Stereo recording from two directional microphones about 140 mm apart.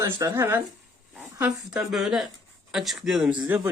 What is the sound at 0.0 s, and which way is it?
Speech, 20° right (ahead or behind).